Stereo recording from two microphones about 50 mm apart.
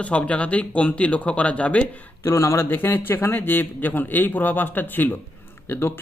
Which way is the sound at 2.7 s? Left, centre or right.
Left.